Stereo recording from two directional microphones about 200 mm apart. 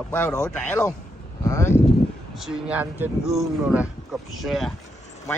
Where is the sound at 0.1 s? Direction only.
15° left (ahead or behind).